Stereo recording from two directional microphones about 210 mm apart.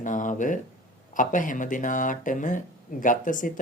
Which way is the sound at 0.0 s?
40° left (ahead or behind).